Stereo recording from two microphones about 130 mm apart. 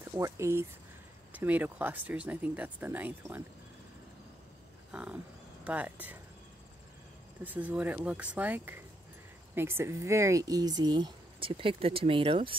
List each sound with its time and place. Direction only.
0.1 s speech: 25° right (ahead or behind)
4.9 s speech: 10° right (ahead or behind)
7.4 s speech: 10° right (ahead or behind); by 12.5 s 45° right (ahead or behind)